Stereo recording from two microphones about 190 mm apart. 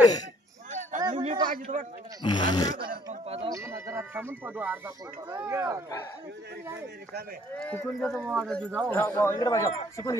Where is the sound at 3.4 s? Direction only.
15° right (ahead or behind).